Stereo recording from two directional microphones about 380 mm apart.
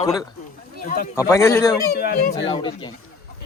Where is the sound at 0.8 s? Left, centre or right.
Left.